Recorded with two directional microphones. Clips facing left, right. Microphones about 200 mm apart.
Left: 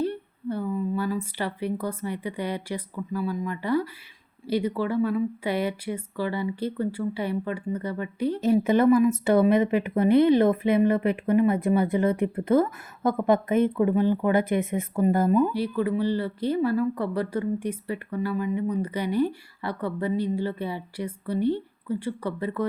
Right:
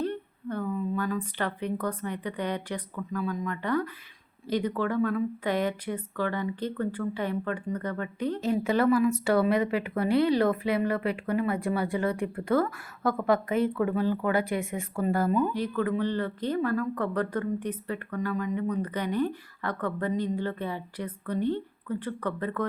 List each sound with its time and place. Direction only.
0.0 s speech: 10° left (ahead or behind)